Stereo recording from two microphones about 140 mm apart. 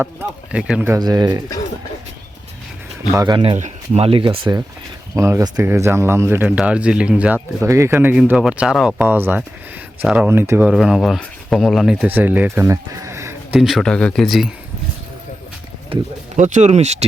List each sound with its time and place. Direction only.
0.0 s speech: 15° right (ahead or behind)
0.9 s speech: 30° right (ahead or behind)
3.1 s speech: 25° right (ahead or behind)
3.6 s speech: 45° right (ahead or behind)
5.1 s speech: 20° right (ahead or behind); by 9.0 s centre (ahead or behind)
9.0 s speech: 15° right (ahead or behind)
10.7 s speech: 5° right (ahead or behind); by 13.6 s 20° right (ahead or behind)
13.6 s speech: centre (ahead or behind)
15.9 s speech: 40° right (ahead or behind)
16.3 s speech: 60° right (ahead or behind)